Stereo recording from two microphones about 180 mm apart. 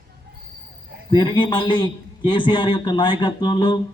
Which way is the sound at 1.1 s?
25° left (ahead or behind).